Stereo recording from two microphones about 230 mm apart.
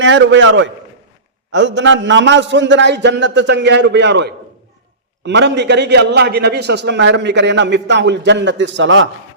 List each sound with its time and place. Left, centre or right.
0.0 s a man's voice: right